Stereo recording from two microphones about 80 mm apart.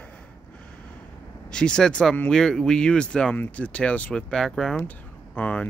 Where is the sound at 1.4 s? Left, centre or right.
Centre.